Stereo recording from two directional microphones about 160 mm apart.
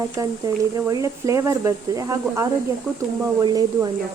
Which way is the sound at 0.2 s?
20° right (ahead or behind).